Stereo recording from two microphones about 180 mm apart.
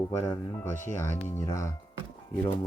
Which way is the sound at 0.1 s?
15° left (ahead or behind).